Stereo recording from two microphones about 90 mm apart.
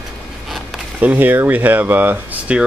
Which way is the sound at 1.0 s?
20° right (ahead or behind).